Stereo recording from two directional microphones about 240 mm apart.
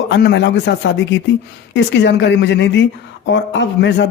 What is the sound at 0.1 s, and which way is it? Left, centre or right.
Speech, left.